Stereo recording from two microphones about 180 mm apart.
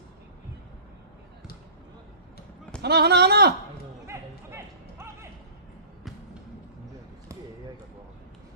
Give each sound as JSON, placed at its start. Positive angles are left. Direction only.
{"t": 2.8, "sound": "speech", "side_deg": -65}
{"t": 4.0, "sound": "music", "side_deg": -15}